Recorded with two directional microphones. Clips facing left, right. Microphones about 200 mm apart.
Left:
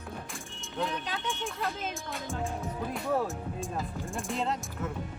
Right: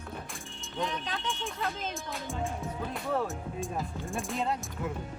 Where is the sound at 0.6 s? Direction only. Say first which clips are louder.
Left 1 dB; 5° left (ahead or behind).